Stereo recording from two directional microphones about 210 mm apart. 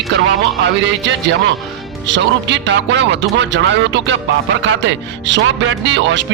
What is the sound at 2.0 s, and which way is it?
A man's voice, 60° right (ahead or behind).